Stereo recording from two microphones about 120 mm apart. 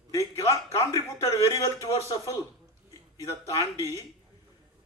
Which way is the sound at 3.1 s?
25° left (ahead or behind).